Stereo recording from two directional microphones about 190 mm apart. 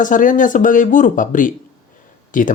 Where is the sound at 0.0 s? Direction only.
45° left (ahead or behind).